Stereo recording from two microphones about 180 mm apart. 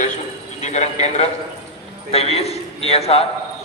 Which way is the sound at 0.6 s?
40° left (ahead or behind).